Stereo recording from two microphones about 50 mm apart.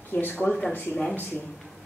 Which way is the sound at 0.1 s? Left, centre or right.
Left.